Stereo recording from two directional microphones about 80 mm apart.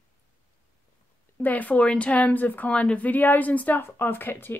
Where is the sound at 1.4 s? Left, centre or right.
Left.